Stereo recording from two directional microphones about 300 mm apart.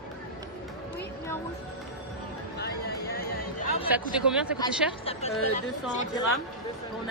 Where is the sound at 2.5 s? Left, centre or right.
Left.